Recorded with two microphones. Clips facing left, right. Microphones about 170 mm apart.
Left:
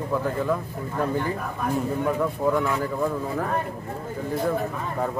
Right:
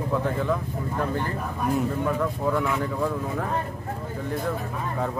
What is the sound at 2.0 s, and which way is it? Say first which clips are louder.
Speech: left 2 dB; 5° left (ahead or behind).